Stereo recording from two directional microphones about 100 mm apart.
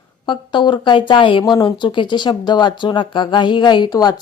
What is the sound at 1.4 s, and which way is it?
Speech, 45° left (ahead or behind).